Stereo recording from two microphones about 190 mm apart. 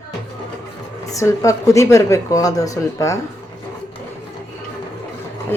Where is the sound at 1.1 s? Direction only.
15° left (ahead or behind).